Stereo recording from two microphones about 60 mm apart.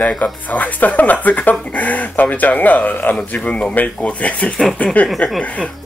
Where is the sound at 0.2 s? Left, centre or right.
Left.